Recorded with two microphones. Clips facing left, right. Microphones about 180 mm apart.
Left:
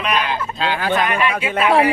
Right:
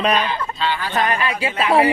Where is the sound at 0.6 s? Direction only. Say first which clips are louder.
Left 4 dB; 50° left (ahead or behind).